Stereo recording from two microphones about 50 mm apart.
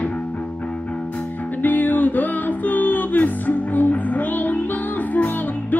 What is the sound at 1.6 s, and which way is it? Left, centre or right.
Music, left.